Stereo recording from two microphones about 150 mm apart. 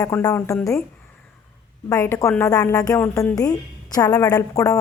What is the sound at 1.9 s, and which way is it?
A woman's voice, 20° left (ahead or behind).